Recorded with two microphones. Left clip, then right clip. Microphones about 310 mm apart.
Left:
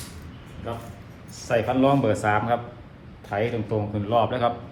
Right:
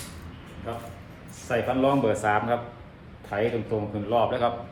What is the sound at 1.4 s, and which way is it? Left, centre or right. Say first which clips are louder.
A man's voice: left 3 dB; centre.